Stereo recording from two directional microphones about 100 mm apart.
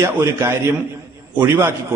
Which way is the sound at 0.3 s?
25° right (ahead or behind).